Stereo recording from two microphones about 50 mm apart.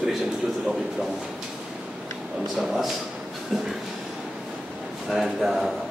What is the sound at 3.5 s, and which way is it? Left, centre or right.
Speech, centre.